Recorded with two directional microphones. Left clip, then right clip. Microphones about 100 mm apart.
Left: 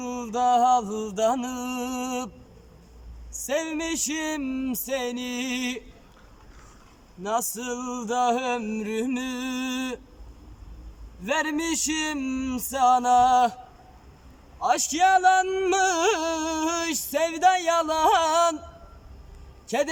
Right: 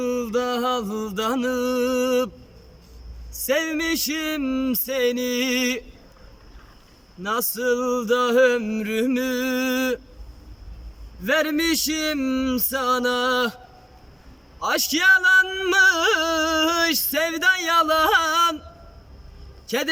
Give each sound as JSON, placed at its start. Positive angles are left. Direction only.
{"t": 0.0, "sound": "speech", "side_deg": 30}
{"t": 3.4, "sound": "speech", "side_deg": 35}
{"t": 7.2, "sound": "speech", "side_deg": 30}
{"t": 11.2, "sound": "speech", "side_deg": 30}
{"t": 14.6, "sound": "speech", "side_deg": 30}
{"t": 19.6, "sound": "speech", "side_deg": 35}